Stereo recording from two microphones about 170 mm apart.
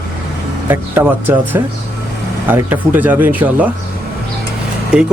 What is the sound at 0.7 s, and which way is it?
Speech, 10° right (ahead or behind).